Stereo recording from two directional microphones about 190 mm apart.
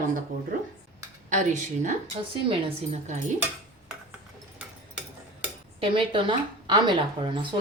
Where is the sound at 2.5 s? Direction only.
30° right (ahead or behind).